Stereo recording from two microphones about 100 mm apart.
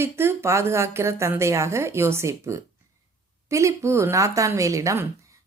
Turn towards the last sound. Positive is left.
turn(degrees=-30)  # may be behind; listen again after turning